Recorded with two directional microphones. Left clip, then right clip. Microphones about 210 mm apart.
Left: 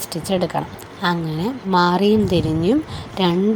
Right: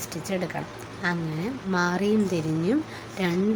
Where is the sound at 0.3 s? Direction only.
20° left (ahead or behind).